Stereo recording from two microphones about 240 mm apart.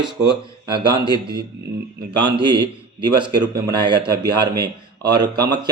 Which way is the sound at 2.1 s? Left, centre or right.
Centre.